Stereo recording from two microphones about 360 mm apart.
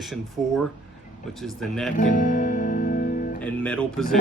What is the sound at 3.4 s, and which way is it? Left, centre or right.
Speech, centre.